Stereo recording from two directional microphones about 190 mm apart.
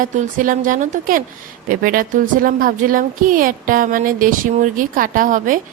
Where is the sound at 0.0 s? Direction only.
45° right (ahead or behind).